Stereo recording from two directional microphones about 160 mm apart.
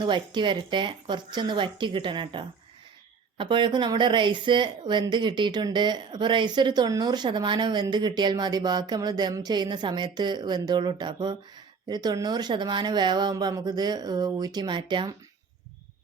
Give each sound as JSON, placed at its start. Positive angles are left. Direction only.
{"t": 0.0, "sound": "speech", "side_deg": -30}